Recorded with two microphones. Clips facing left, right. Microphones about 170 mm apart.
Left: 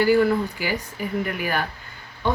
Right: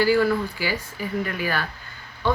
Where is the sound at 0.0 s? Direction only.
20° left (ahead or behind).